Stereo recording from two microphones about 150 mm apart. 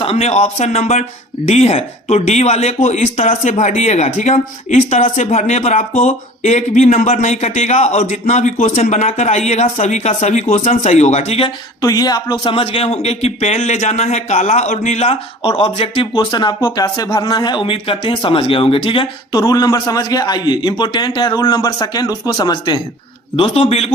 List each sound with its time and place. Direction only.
0.0 s speech: 45° left (ahead or behind)
11.8 s speech: 25° left (ahead or behind)
23.4 s speech: 40° left (ahead or behind)